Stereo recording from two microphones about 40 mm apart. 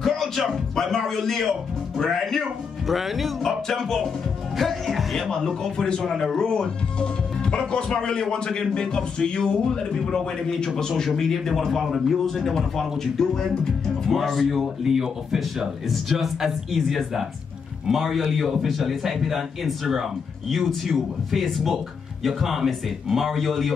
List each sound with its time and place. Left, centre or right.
0.0 s a man's voice: centre
3.4 s music: centre
4.6 s a man's voice: centre
5.3 s music: centre
6.3 s speech: centre
11.1 s music: centre
11.9 s a man's voice: centre
12.9 s music: centre
14.1 s a man's voice: centre